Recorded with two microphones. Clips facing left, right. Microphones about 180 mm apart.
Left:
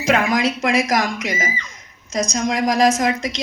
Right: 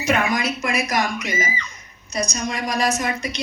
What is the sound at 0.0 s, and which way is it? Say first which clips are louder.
A woman's voice: left 3 dB; 90° left.